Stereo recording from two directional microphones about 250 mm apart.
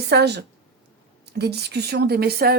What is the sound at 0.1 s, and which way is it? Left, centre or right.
Speech, right.